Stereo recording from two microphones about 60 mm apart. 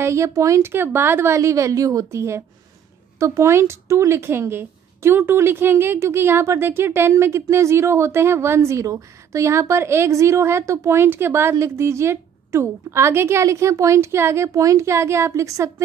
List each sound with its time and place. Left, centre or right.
0.0 s a woman's voice: right